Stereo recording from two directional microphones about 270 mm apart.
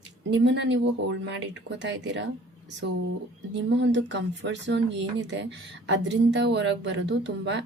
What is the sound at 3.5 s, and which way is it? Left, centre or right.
Speech, right.